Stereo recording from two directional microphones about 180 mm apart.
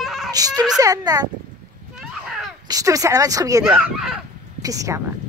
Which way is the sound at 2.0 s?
5° right (ahead or behind).